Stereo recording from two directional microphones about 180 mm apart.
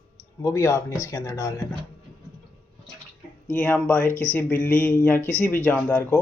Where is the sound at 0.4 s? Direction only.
15° left (ahead or behind).